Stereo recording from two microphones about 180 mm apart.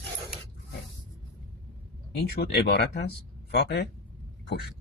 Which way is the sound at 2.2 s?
60° left (ahead or behind).